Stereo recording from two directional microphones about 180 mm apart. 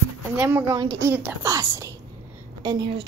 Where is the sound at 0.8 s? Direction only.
20° right (ahead or behind).